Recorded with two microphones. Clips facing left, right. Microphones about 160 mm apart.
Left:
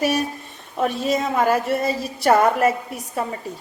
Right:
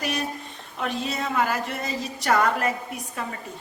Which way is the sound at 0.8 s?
40° left (ahead or behind).